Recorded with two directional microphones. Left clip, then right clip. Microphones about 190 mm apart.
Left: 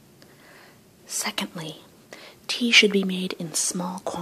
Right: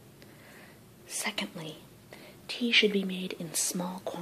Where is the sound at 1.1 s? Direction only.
15° left (ahead or behind).